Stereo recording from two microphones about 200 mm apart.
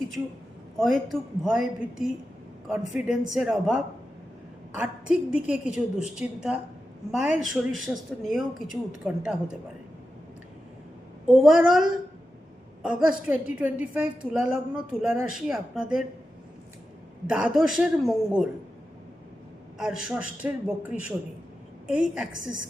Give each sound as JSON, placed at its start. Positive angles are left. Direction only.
{"t": 0.8, "sound": "a woman's voice", "side_deg": 0}
{"t": 4.8, "sound": "a woman's voice", "side_deg": -5}
{"t": 11.3, "sound": "a woman's voice", "side_deg": -5}
{"t": 17.2, "sound": "a woman's voice", "side_deg": -5}
{"t": 19.8, "sound": "a man's voice", "side_deg": -5}